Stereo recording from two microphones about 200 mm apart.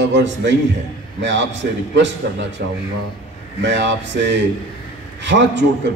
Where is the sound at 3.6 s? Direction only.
60° right (ahead or behind).